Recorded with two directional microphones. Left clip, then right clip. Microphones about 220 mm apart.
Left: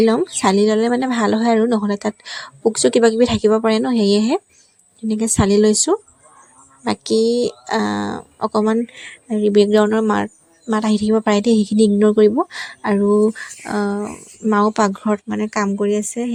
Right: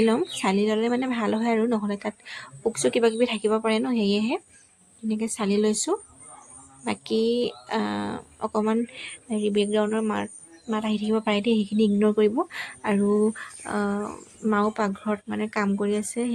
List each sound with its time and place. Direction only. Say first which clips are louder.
0.0 s speech: left 7 dB; 25° left (ahead or behind)